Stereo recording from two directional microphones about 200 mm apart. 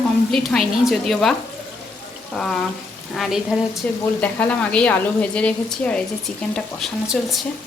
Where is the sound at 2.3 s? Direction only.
Centre (ahead or behind).